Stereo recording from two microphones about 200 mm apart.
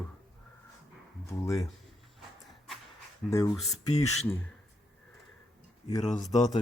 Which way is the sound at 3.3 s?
15° left (ahead or behind).